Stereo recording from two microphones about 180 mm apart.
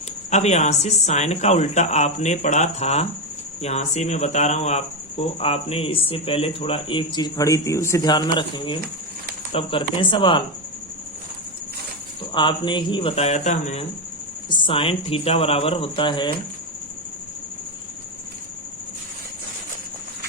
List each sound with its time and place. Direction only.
0.3 s speech: 40° left (ahead or behind)
12.3 s speech: 25° left (ahead or behind)
14.5 s speech: 30° left (ahead or behind)